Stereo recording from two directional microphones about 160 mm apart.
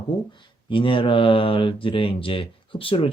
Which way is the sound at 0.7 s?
35° left (ahead or behind).